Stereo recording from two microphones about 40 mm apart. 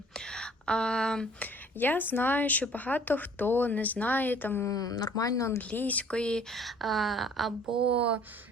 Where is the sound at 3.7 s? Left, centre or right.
Left.